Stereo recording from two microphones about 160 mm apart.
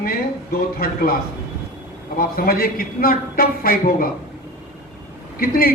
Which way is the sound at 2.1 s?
70° left (ahead or behind).